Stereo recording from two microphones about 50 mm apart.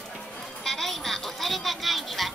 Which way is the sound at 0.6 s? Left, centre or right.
Centre.